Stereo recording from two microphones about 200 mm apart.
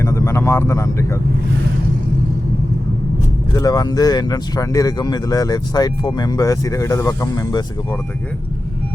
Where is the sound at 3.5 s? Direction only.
15° left (ahead or behind).